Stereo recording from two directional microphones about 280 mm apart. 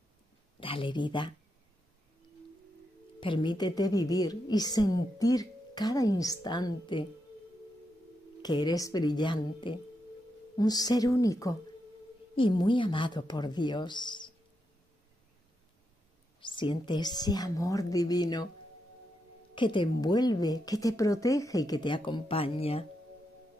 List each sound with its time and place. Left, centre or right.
0.6 s speech: centre
3.2 s a woman's voice: centre
8.4 s a woman's voice: centre
16.3 s a woman's voice: centre
19.5 s a woman's voice: centre